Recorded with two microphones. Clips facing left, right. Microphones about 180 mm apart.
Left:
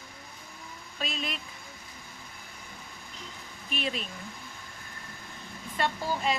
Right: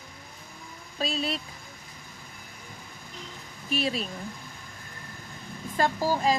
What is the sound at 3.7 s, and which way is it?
Speech, 40° right (ahead or behind).